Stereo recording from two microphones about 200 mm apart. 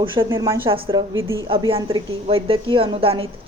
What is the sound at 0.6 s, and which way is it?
A woman's voice, 25° right (ahead or behind).